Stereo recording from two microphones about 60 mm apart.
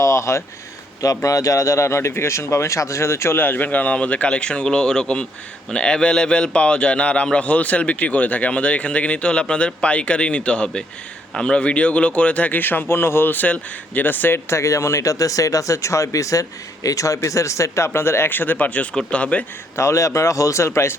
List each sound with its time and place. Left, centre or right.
0.0 s a sound: left
1.0 s a man's voice: left
14.5 s speech: left
18.3 s a man's voice: left
19.7 s speech: left